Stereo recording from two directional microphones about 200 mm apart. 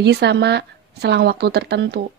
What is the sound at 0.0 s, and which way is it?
Speech, 55° right (ahead or behind).